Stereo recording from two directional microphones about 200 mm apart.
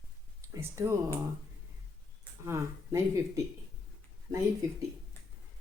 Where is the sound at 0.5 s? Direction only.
15° right (ahead or behind).